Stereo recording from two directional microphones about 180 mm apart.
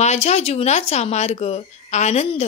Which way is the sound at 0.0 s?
40° left (ahead or behind).